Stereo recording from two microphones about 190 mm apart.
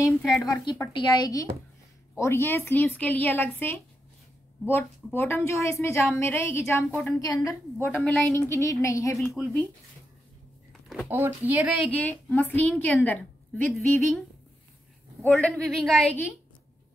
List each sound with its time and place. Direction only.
0.4 s a woman's voice: 15° left (ahead or behind)
7.9 s a woman's voice: 5° left (ahead or behind)
8.5 s a woman's voice: 15° left (ahead or behind)
9.4 s a woman's voice: 5° right (ahead or behind)
10.7 s a sound: centre (ahead or behind)
11.1 s a woman's voice: 10° right (ahead or behind)
15.2 s a woman's voice: 5° left (ahead or behind)